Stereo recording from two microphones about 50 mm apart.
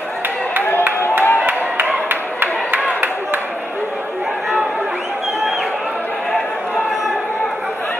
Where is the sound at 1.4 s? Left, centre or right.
Right.